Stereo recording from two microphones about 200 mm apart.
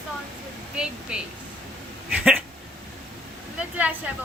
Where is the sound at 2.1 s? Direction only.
5° right (ahead or behind).